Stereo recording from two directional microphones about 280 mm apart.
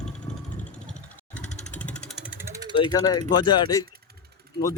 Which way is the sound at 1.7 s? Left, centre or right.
Centre.